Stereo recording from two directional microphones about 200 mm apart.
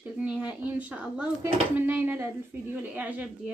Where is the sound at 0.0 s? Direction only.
5° right (ahead or behind).